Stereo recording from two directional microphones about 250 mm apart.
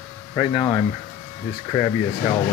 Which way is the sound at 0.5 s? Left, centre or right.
Centre.